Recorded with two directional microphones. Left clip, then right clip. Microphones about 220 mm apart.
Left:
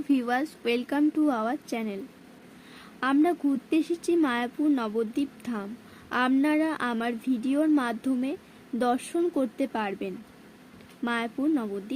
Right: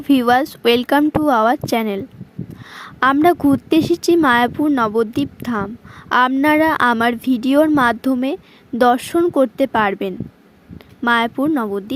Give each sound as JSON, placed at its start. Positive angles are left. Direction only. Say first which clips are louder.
{"t": 0.1, "sound": "a woman's voice", "louder": "right 13 dB", "side_deg": -40}